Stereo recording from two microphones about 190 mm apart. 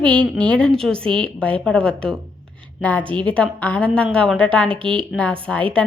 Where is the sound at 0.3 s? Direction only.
5° left (ahead or behind).